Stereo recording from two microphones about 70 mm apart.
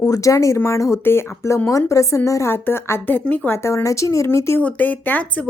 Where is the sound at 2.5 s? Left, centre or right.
Left.